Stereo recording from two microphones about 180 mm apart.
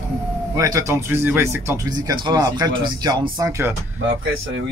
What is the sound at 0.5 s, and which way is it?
Speech, 15° right (ahead or behind).